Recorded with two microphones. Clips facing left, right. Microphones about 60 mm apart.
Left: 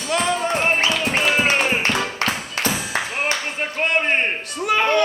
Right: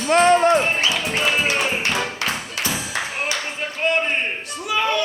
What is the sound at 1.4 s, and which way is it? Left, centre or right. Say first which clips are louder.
Clapping: left 2 dB; left.